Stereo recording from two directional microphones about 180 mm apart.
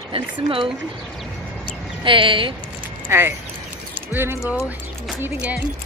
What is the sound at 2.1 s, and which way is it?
Speech, 30° right (ahead or behind).